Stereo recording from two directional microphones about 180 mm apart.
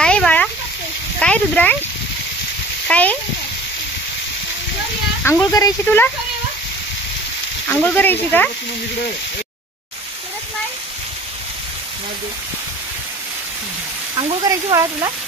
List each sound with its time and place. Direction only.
0.0 s a sound: 5° left (ahead or behind)
1.2 s speech: 5° left (ahead or behind)
2.9 s speech: 10° left (ahead or behind)
5.2 s speech: 15° left (ahead or behind)
7.6 s speech: 10° left (ahead or behind)
14.4 s speech: 20° right (ahead or behind)